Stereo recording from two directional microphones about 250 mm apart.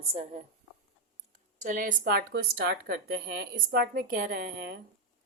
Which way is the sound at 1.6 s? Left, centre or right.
Right.